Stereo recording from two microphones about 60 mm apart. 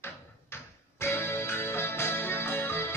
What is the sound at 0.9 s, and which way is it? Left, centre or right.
Music, left.